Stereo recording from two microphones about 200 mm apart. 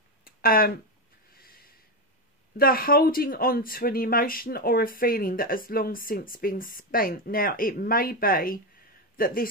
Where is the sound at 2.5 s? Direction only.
45° left (ahead or behind).